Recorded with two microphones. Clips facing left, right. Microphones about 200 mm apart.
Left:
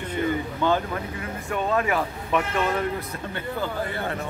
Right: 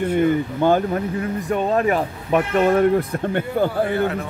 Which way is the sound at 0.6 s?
45° right (ahead or behind).